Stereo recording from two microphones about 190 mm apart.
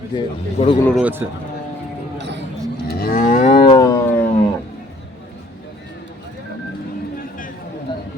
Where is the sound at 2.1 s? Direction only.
65° right (ahead or behind).